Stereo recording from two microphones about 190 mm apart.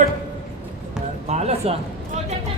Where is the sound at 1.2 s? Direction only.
35° right (ahead or behind).